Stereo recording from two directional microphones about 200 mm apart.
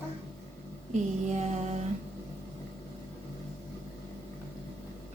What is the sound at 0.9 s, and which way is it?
Speech, 35° right (ahead or behind).